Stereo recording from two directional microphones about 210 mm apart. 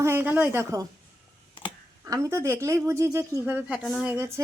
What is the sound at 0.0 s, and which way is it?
Speech, 10° right (ahead or behind).